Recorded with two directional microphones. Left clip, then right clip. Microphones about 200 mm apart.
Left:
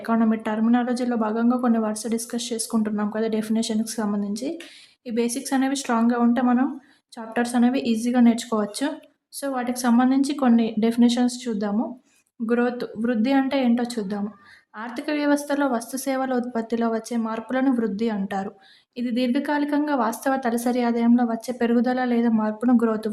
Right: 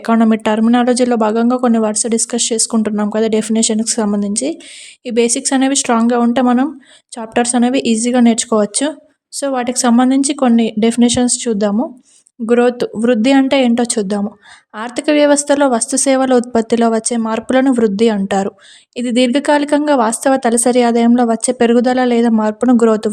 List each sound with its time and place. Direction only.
0.0 s speech: 40° right (ahead or behind)